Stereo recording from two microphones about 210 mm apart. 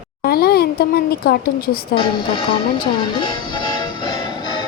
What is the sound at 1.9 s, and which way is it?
Music, 25° left (ahead or behind).